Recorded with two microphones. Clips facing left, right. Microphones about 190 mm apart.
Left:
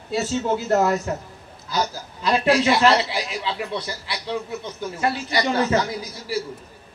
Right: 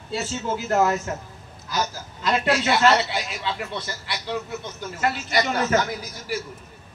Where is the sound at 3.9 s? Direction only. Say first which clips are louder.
Left 1 dB; 30° left (ahead or behind).